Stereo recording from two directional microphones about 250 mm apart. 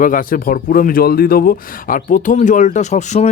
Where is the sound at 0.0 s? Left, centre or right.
Left.